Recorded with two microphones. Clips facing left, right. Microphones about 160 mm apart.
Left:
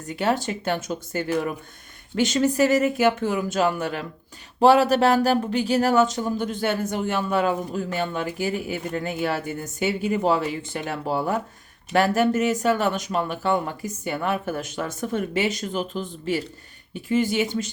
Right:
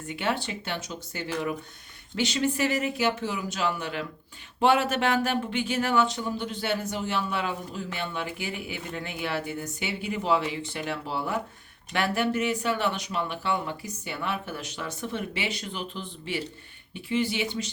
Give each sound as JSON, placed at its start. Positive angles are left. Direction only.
{"t": 0.0, "sound": "speech", "side_deg": 40}